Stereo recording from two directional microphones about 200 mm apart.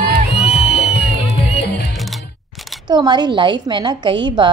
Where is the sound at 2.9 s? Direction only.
20° right (ahead or behind).